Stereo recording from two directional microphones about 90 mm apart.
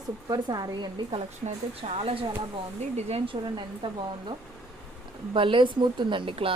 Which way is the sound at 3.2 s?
75° right (ahead or behind).